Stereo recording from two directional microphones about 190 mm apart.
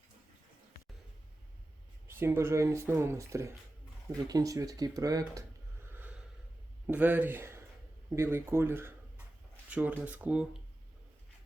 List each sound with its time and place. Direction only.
2.0 s speech: 15° right (ahead or behind)
5.9 s a sound: 10° right (ahead or behind)
6.8 s speech: 10° right (ahead or behind)